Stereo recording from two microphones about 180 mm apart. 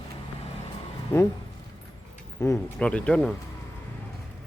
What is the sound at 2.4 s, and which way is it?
Speech, 20° left (ahead or behind).